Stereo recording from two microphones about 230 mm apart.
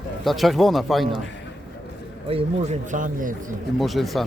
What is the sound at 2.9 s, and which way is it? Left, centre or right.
Speech, right.